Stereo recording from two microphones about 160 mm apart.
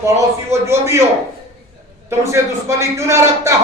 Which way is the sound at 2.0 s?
15° right (ahead or behind).